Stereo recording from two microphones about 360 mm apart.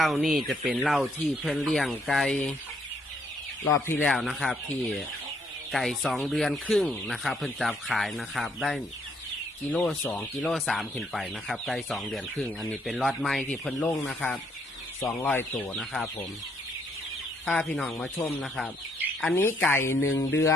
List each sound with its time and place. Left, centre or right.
0.0 s speech: centre
3.8 s speech: centre
5.7 s speech: centre
17.4 s speech: centre
20.0 s speech: left